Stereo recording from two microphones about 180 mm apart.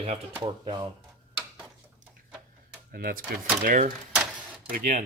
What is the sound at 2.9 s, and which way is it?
Speech, 55° right (ahead or behind).